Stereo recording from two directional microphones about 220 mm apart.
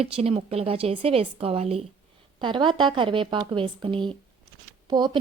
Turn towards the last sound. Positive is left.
turn(degrees=-20)  # may be behind; listen again after turning